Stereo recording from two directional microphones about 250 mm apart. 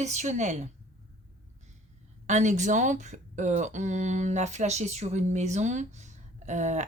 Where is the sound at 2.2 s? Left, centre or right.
Right.